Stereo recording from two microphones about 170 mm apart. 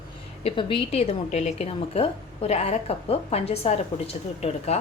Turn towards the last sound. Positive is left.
turn(degrees=40)  # may be behind; listen again after turning